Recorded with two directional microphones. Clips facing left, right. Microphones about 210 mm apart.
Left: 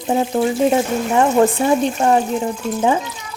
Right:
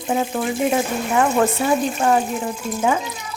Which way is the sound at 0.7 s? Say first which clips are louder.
Left 3 dB; 25° left (ahead or behind).